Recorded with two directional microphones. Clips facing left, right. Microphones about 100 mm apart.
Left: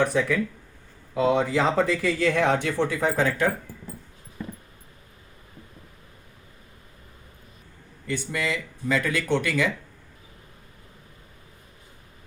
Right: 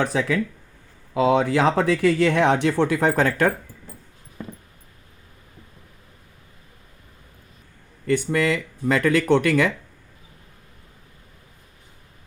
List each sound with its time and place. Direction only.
0.0 s speech: 90° right; by 3.5 s 60° right (ahead or behind)
8.0 s speech: 55° right (ahead or behind)